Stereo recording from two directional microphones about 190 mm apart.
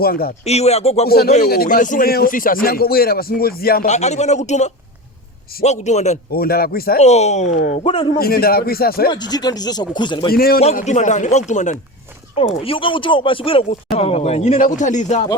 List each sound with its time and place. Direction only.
0.0 s speech: 50° left (ahead or behind)
0.4 s speech: 35° left (ahead or behind)
1.0 s speech: 55° left (ahead or behind)
3.8 s speech: 35° left (ahead or behind)
6.3 s speech: 50° left (ahead or behind)
7.0 s speech: 35° left (ahead or behind)
7.5 s speech: 55° left (ahead or behind)
7.9 s speech: 25° left (ahead or behind)
8.2 s speech: 50° left (ahead or behind)
9.0 s speech: 20° left (ahead or behind)
10.3 s speech: 50° left (ahead or behind)
10.8 s speech: 40° left (ahead or behind)
12.6 s speech: 30° left (ahead or behind)